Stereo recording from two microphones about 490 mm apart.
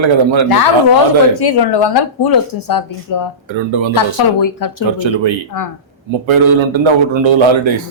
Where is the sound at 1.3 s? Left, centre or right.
Left.